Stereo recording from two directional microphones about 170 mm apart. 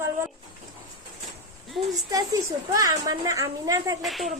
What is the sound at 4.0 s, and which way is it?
Speech, centre (ahead or behind).